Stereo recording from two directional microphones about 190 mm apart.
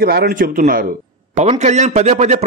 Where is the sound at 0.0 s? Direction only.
55° right (ahead or behind).